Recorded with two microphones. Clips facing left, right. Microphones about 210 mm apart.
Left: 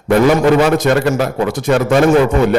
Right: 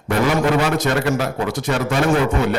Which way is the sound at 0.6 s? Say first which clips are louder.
Left 7 dB; 50° left (ahead or behind).